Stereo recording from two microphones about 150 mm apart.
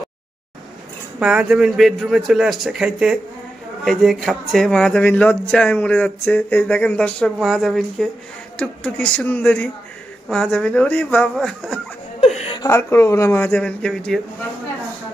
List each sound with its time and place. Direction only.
1.2 s a man's voice: 5° right (ahead or behind)
12.2 s chuckle: 45° left (ahead or behind)
12.5 s speech: 20° left (ahead or behind)